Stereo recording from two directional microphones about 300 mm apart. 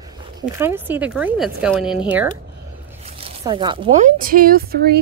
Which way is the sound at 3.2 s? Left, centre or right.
Centre.